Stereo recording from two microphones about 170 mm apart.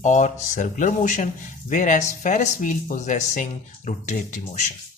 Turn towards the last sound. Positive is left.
turn(degrees=45)  # may be behind; listen again after turning